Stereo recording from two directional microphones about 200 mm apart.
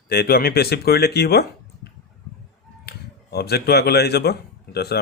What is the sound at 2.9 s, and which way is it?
Speech, 50° left (ahead or behind).